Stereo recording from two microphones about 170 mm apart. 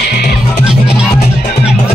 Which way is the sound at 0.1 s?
75° left (ahead or behind).